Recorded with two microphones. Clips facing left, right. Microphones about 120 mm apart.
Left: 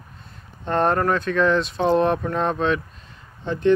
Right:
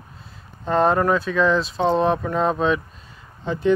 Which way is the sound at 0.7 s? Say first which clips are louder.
Right 2 dB; centre (ahead or behind).